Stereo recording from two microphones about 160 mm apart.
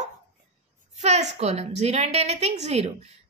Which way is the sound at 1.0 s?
45° right (ahead or behind).